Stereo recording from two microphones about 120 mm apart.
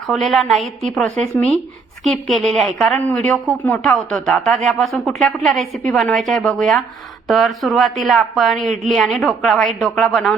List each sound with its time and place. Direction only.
0.1 s a woman's voice: centre (ahead or behind)